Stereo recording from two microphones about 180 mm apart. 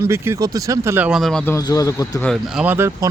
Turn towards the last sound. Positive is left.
turn(degrees=-10)  # may be behind; listen again after turning